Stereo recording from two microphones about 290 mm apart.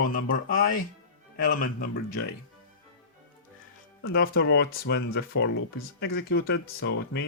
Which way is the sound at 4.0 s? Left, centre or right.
Left.